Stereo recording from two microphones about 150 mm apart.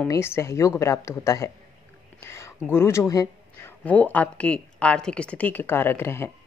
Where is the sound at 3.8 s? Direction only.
10° left (ahead or behind).